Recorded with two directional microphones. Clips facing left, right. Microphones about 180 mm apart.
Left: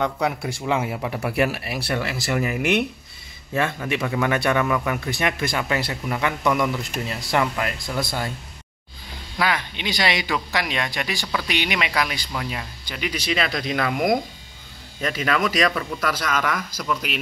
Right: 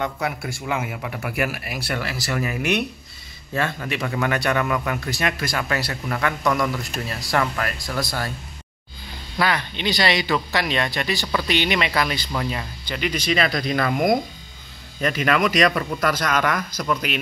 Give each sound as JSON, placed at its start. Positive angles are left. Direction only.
{"t": 0.7, "sound": "a man's voice", "side_deg": 25}
{"t": 3.5, "sound": "a man's voice", "side_deg": 20}
{"t": 9.4, "sound": "speech", "side_deg": 10}